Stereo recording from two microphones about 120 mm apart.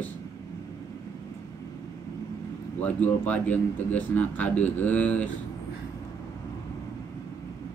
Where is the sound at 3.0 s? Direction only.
10° left (ahead or behind).